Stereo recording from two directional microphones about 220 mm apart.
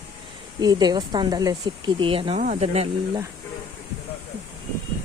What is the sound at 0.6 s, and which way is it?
Speech, 20° right (ahead or behind).